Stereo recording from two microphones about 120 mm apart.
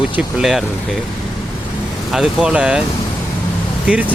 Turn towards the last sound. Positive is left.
turn(degrees=-10)  # may be behind; listen again after turning